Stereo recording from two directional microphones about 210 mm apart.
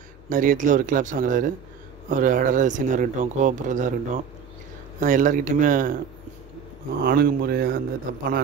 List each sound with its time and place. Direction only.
0.3 s speech: 40° right (ahead or behind)
7.1 s speech: 50° right (ahead or behind)